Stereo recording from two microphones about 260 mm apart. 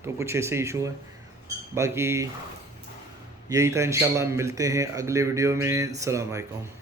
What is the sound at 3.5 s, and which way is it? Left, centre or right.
A man's voice, centre.